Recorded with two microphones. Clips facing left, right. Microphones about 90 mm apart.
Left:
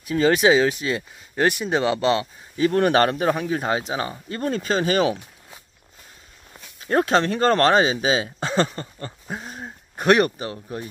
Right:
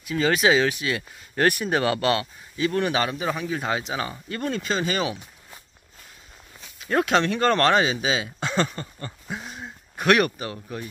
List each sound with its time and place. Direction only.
0.0 s speech: 30° left (ahead or behind)
1.3 s speech: 15° left (ahead or behind)
2.6 s speech: 45° left (ahead or behind)
6.9 s speech: 35° left (ahead or behind)